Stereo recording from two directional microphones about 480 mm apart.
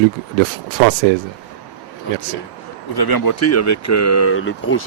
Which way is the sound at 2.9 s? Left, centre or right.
Left.